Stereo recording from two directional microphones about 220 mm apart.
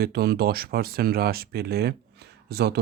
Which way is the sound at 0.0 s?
45° right (ahead or behind).